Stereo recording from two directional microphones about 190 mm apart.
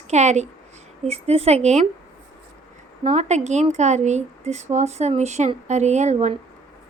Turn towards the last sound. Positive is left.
turn(degrees=-35)  # may be behind; listen again after turning